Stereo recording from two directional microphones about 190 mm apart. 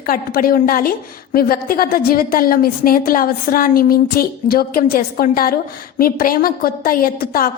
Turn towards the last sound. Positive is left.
turn(degrees=50)  # may be behind; listen again after turning